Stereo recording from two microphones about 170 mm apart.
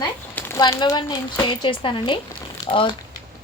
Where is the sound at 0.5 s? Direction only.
25° left (ahead or behind).